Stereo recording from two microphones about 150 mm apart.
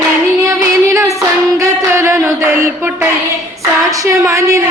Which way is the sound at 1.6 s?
20° right (ahead or behind).